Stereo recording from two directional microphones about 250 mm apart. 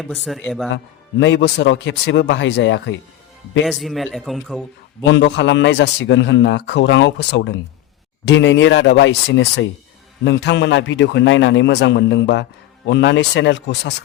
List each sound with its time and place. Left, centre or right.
0.3 s a man's voice: centre
1.2 s a man's voice: left
3.7 s a man's voice: centre
5.0 s a man's voice: left